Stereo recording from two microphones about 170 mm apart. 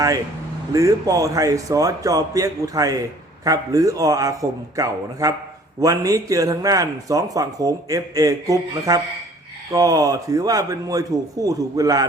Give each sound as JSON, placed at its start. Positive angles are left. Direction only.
{"t": 0.7, "sound": "a man's voice", "side_deg": -20}